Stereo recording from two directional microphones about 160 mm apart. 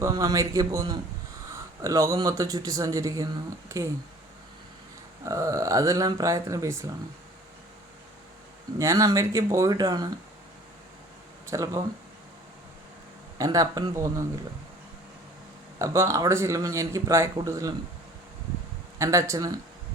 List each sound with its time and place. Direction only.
0.0 s speech: 20° right (ahead or behind)
5.2 s speech: 20° right (ahead or behind)
8.8 s speech: 20° right (ahead or behind)
11.5 s speech: 20° right (ahead or behind)
13.4 s speech: 20° right (ahead or behind)
15.8 s speech: 20° right (ahead or behind)
18.9 s speech: 20° right (ahead or behind)